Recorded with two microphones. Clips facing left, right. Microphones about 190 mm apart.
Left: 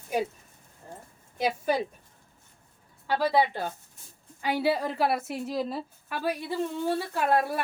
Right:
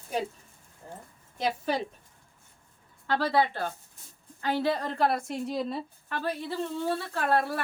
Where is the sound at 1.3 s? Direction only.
10° left (ahead or behind).